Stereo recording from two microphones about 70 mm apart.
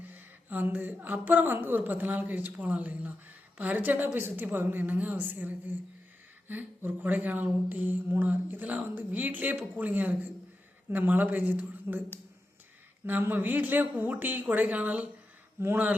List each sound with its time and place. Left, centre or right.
0.0 s speech: right
13.1 s speech: right